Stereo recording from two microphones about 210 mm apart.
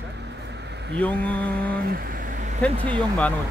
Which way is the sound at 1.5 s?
45° right (ahead or behind).